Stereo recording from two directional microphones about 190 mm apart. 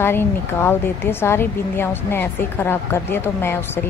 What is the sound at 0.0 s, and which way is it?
Speech, 10° left (ahead or behind).